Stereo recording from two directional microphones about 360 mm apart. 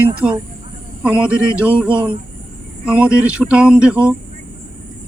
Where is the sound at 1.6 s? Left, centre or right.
Centre.